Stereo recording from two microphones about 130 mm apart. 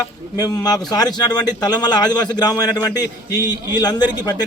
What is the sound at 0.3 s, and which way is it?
A man's voice, 30° left (ahead or behind).